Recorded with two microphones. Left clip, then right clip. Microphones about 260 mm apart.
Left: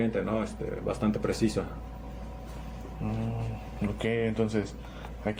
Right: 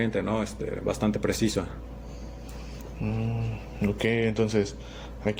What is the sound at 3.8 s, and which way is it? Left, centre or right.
Speech, right.